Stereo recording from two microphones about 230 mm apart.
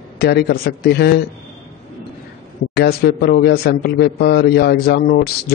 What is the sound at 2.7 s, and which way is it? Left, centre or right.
A man's voice, left.